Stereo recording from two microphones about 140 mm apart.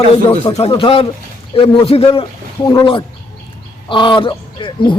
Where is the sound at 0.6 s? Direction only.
40° left (ahead or behind).